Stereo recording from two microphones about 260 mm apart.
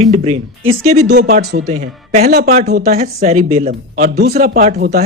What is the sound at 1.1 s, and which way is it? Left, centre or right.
Speech, right.